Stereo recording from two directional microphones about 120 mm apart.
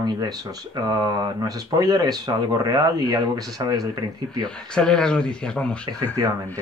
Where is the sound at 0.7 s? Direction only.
35° right (ahead or behind).